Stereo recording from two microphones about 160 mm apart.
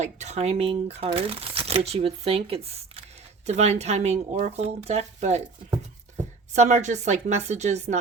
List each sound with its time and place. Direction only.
0.0 s speech: 45° right (ahead or behind)
6.5 s speech: 45° right (ahead or behind)